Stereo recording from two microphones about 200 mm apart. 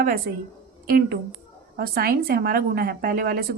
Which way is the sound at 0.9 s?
50° right (ahead or behind).